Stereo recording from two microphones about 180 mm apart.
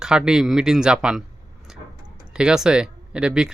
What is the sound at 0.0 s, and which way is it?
Speech, 5° right (ahead or behind).